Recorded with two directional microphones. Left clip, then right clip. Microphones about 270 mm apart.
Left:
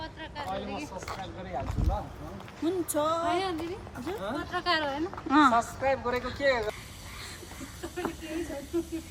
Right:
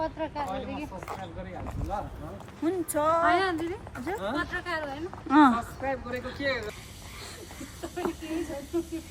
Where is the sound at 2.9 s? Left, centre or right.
Centre.